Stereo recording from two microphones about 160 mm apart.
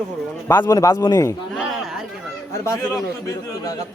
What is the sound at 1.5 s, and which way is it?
Speech, 5° right (ahead or behind).